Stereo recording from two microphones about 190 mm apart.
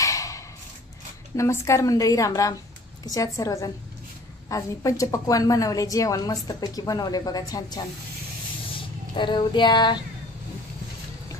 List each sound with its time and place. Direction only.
0.0 s a sound: 15° left (ahead or behind)
1.3 s a woman's voice: 15° left (ahead or behind)
9.1 s a woman's voice: 25° left (ahead or behind)